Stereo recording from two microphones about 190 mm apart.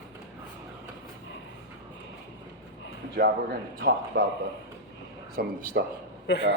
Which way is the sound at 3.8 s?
65° right (ahead or behind).